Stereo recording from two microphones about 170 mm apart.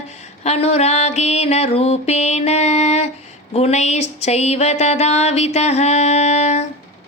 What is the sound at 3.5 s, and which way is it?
Music, 40° left (ahead or behind).